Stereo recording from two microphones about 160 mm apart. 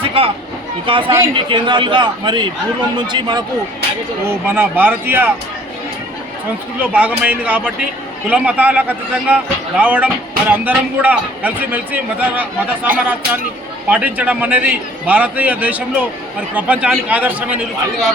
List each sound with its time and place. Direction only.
0.0 s a sound: 35° right (ahead or behind)
0.9 s speech: 35° right (ahead or behind)
4.3 s a man's voice: 15° right (ahead or behind)
6.8 s a man's voice: 10° right (ahead or behind)
13.9 s a man's voice: 10° right (ahead or behind)